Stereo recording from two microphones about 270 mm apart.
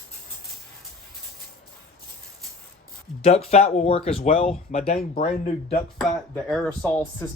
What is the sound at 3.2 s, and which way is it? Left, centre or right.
Speech, left.